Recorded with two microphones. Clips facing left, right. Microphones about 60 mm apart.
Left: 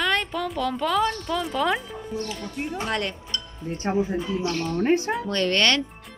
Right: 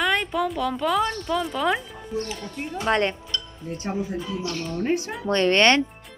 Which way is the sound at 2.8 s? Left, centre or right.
Right.